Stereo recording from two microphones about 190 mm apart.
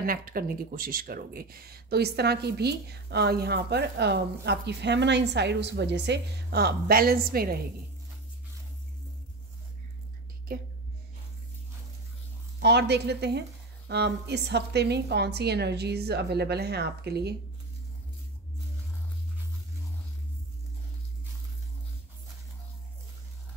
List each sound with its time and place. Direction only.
0.0 s speech: 50° right (ahead or behind)
10.5 s speech: 50° right (ahead or behind)
12.5 s speech: 60° right (ahead or behind)